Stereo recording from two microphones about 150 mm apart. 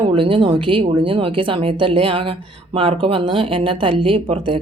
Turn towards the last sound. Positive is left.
turn(degrees=-35)  # may be behind; listen again after turning